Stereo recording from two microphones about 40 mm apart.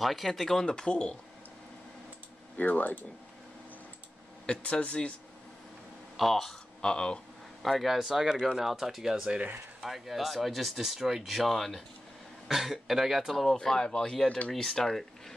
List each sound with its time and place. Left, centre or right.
0.0 s speech: centre
0.7 s speech: left
2.5 s speech: left
4.5 s speech: left
6.1 s speech: centre
6.8 s speech: left
7.6 s speech: centre
13.5 s speech: centre